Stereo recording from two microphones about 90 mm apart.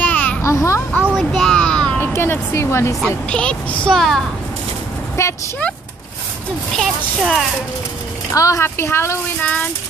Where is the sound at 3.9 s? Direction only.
5° left (ahead or behind).